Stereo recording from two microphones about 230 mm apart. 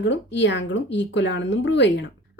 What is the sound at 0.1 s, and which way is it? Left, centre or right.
A woman's voice, left.